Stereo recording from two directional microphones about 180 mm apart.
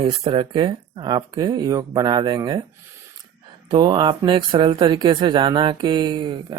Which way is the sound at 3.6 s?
25° right (ahead or behind).